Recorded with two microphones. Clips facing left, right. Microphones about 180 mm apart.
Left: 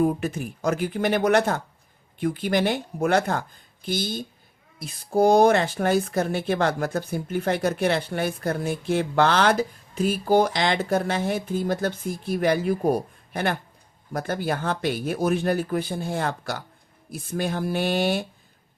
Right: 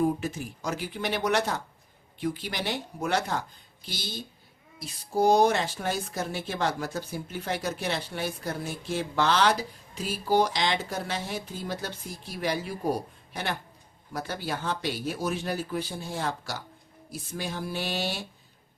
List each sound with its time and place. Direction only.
0.0 s speech: 55° left (ahead or behind)